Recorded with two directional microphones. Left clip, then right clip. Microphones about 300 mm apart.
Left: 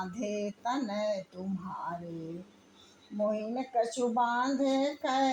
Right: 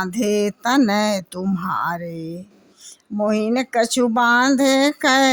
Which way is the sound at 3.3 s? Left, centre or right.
Right.